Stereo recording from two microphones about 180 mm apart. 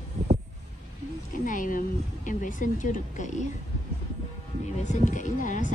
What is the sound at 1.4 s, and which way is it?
A woman's voice, 45° left (ahead or behind).